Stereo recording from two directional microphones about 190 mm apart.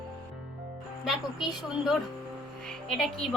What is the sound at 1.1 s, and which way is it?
A woman's voice, centre (ahead or behind).